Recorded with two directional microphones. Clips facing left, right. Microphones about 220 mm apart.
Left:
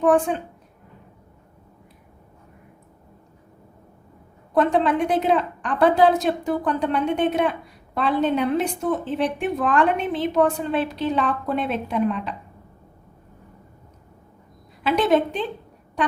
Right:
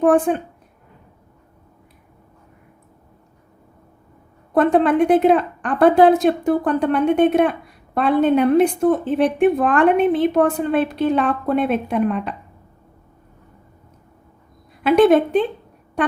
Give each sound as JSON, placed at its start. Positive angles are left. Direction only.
{"t": 0.0, "sound": "a woman's voice", "side_deg": -55}
{"t": 4.5, "sound": "a woman's voice", "side_deg": -55}
{"t": 14.8, "sound": "a woman's voice", "side_deg": -55}